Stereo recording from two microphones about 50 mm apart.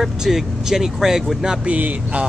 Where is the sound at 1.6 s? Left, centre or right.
Right.